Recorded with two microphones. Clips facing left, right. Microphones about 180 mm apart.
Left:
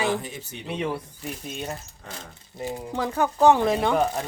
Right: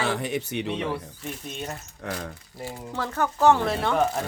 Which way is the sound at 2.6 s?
15° left (ahead or behind).